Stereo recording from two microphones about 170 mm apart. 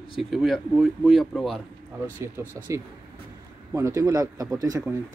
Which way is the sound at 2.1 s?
15° right (ahead or behind).